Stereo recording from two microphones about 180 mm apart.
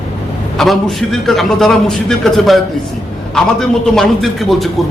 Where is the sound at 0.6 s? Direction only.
Centre (ahead or behind).